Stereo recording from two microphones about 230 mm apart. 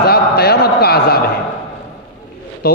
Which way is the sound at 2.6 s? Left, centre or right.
Left.